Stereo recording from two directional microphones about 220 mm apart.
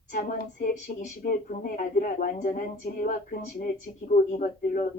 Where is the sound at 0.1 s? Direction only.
40° left (ahead or behind).